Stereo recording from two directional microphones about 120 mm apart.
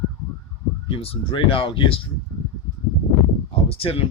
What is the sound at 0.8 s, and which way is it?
Speech, 50° left (ahead or behind).